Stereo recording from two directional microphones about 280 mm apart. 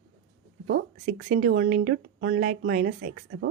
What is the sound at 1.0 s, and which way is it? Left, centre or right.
Speech, right.